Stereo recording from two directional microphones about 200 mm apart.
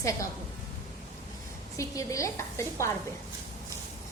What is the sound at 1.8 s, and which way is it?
A woman's voice, 15° left (ahead or behind).